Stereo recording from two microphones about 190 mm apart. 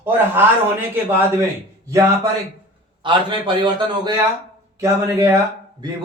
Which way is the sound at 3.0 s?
25° right (ahead or behind).